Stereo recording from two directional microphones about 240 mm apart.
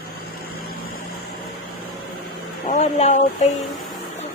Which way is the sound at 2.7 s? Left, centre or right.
Left.